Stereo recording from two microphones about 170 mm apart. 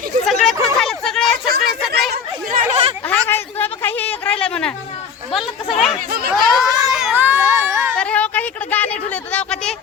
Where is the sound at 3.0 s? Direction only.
10° left (ahead or behind).